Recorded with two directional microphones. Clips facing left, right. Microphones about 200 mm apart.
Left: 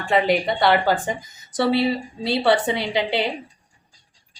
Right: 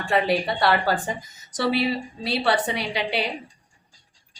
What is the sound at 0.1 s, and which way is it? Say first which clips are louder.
A woman's voice: left 3 dB; 20° left (ahead or behind).